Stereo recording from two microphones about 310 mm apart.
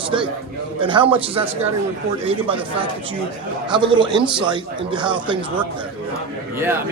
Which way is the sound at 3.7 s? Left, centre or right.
Centre.